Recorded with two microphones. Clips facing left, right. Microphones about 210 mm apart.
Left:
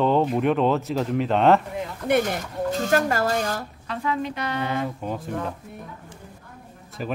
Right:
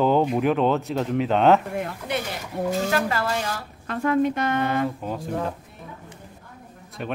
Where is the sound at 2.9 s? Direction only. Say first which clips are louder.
Left 3 dB; 45° left (ahead or behind).